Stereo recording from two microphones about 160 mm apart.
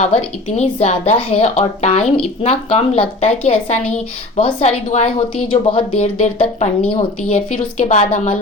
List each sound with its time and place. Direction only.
0.0 s a woman's voice: 45° left (ahead or behind)